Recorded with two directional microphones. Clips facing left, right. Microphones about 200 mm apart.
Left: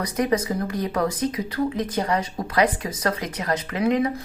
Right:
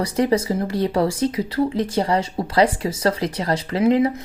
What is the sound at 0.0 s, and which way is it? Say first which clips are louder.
Speech: right 4 dB; 30° right (ahead or behind).